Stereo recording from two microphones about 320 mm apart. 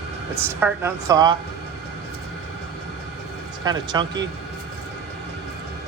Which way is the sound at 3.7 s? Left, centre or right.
Centre.